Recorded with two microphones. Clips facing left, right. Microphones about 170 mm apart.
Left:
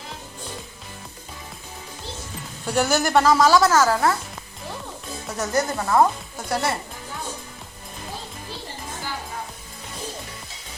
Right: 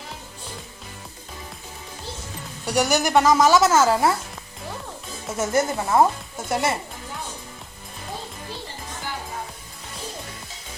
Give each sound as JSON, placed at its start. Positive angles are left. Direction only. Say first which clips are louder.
{"t": 2.7, "sound": "a woman's voice", "louder": "even", "side_deg": -15}
{"t": 5.3, "sound": "a woman's voice", "louder": "right 2 dB", "side_deg": -25}